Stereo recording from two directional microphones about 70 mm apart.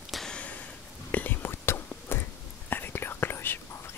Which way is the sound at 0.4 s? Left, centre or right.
Left.